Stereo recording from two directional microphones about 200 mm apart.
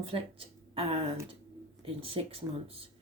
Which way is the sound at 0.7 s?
30° right (ahead or behind).